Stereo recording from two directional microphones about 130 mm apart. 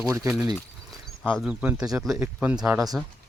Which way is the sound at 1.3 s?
5° right (ahead or behind).